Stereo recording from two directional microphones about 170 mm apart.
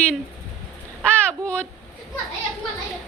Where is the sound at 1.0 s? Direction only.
5° left (ahead or behind).